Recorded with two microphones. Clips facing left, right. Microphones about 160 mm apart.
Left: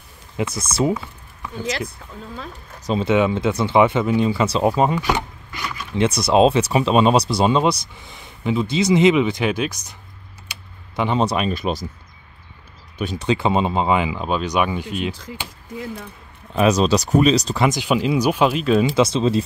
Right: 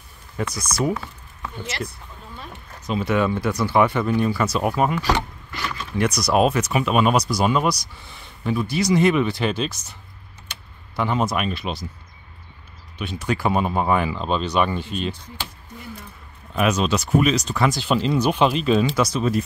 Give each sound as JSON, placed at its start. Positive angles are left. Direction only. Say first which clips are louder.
{"t": 0.4, "sound": "speech", "louder": "left 3 dB", "side_deg": 25}
{"t": 0.9, "sound": "a sound", "louder": "left 2 dB", "side_deg": 10}
{"t": 2.5, "sound": "speech", "louder": "left 3 dB", "side_deg": 30}
{"t": 4.9, "sound": "a sound", "louder": "left 1 dB", "side_deg": 15}
{"t": 5.9, "sound": "speech", "louder": "left 4 dB", "side_deg": 25}
{"t": 10.5, "sound": "typing", "louder": "left 2 dB", "side_deg": 20}
{"t": 11.2, "sound": "speech", "louder": "left 4 dB", "side_deg": 30}
{"t": 12.9, "sound": "speech", "louder": "left 5 dB", "side_deg": 40}
{"t": 13.2, "sound": "speech", "louder": "left 2 dB", "side_deg": 25}
{"t": 15.0, "sound": "speech", "louder": "left 2 dB", "side_deg": 90}
{"t": 16.5, "sound": "speech", "louder": "left 4 dB", "side_deg": 35}
{"t": 17.6, "sound": "speech", "louder": "left 2 dB", "side_deg": 20}
{"t": 18.9, "sound": "speech", "louder": "left 4 dB", "side_deg": 25}